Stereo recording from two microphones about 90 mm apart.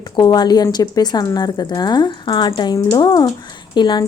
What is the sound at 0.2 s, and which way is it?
A woman's voice, 50° left (ahead or behind).